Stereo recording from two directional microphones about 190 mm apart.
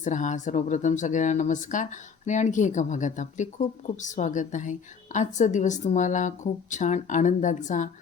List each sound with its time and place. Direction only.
0.0 s speech: 40° left (ahead or behind)